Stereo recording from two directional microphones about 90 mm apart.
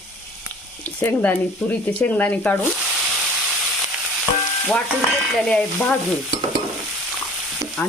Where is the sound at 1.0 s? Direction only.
20° left (ahead or behind).